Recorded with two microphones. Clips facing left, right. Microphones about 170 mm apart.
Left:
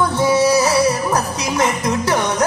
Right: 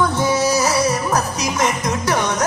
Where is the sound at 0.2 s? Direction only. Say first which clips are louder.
Left 3 dB; 30° left (ahead or behind).